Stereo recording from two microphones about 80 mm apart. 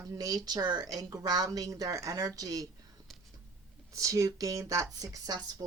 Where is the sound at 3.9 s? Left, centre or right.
Right.